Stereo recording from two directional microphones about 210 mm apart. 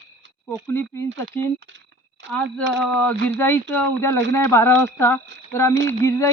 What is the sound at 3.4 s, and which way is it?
Speech, 10° left (ahead or behind).